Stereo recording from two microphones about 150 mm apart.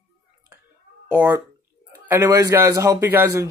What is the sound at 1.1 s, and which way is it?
A man's voice, 20° right (ahead or behind).